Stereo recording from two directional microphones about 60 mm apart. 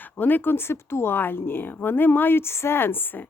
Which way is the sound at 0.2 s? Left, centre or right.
Left.